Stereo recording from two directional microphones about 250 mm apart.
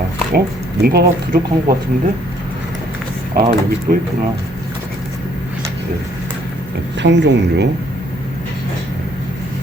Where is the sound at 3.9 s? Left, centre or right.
Right.